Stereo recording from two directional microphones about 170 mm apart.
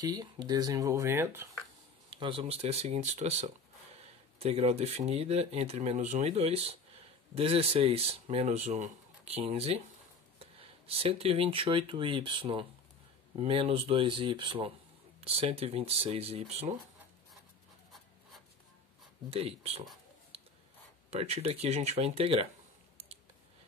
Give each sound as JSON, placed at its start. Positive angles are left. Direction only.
{"t": 0.0, "sound": "speech", "side_deg": -25}
{"t": 2.0, "sound": "speech", "side_deg": -30}
{"t": 19.3, "sound": "speech", "side_deg": -35}
{"t": 21.1, "sound": "speech", "side_deg": -40}